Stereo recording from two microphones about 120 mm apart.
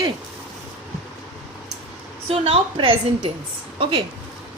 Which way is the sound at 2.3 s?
50° right (ahead or behind).